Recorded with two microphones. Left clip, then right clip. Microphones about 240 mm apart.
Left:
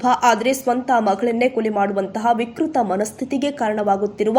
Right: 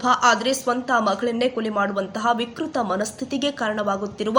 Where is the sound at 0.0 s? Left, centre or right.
Centre.